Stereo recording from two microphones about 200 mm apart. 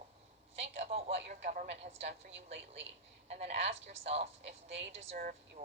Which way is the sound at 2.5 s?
60° right (ahead or behind).